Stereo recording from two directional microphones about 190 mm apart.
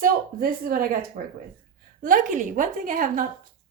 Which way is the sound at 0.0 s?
50° right (ahead or behind).